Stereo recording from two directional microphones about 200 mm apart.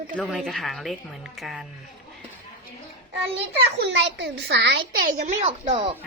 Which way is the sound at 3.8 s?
65° right (ahead or behind).